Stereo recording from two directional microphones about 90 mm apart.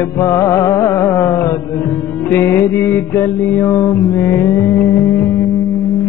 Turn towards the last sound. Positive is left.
turn(degrees=25)  # may be behind; listen again after turning